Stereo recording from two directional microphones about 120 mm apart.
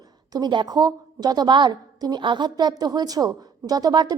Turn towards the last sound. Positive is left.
turn(degrees=-35)  # may be behind; listen again after turning